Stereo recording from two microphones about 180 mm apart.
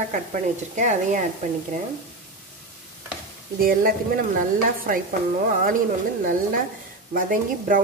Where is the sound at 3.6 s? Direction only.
55° right (ahead or behind).